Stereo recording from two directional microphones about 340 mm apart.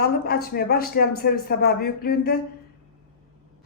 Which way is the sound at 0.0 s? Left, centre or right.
Left.